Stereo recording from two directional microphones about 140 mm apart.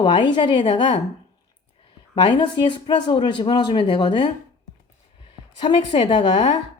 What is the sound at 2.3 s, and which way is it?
Speech, 30° left (ahead or behind).